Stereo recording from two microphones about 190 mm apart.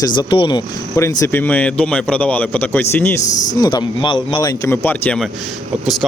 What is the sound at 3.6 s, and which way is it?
A man's voice, 20° left (ahead or behind).